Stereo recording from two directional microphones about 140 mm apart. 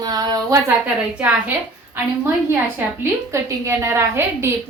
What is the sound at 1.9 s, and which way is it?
A woman's voice, 15° right (ahead or behind).